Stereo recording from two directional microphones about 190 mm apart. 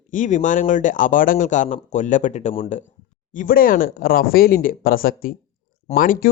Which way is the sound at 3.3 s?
45° left (ahead or behind).